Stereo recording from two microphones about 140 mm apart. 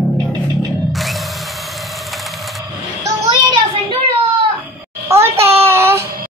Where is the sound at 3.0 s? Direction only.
25° right (ahead or behind).